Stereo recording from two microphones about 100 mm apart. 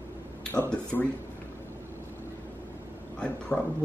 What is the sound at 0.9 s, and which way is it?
Speech, 20° left (ahead or behind).